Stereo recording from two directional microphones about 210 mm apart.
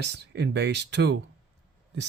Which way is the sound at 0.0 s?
55° right (ahead or behind).